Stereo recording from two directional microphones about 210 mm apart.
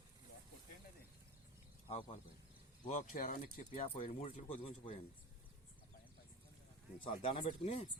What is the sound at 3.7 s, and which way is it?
Speech, 25° left (ahead or behind).